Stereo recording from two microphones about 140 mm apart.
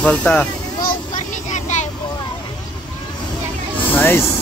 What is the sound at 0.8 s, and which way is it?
Child singing, 60° left (ahead or behind).